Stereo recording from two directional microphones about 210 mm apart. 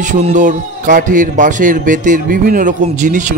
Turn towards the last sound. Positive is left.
turn(degrees=-35)  # may be behind; listen again after turning